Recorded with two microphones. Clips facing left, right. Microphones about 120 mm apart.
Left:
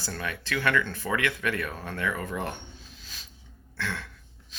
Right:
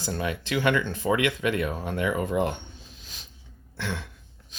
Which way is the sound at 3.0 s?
20° right (ahead or behind).